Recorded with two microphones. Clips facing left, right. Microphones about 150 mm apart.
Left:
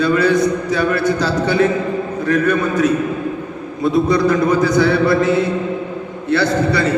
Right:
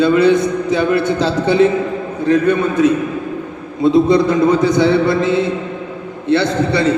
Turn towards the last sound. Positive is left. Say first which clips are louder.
# right 1 dB
turn(degrees=-25)  # may be behind; listen again after turning